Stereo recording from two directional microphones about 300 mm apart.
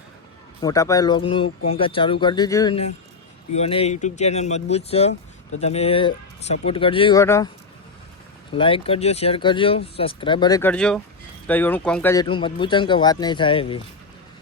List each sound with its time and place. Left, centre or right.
0.6 s speech: centre
8.5 s speech: centre